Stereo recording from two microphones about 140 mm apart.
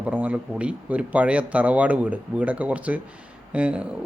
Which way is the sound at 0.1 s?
10° right (ahead or behind).